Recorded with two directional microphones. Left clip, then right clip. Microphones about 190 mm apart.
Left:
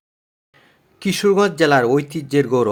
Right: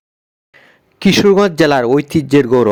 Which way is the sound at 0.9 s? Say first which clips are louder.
Right 6 dB; 35° right (ahead or behind).